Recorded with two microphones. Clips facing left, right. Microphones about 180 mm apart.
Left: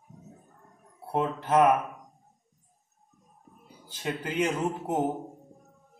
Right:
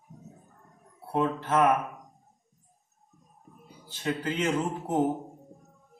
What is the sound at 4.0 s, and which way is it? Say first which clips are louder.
Speech: even; 15° left (ahead or behind).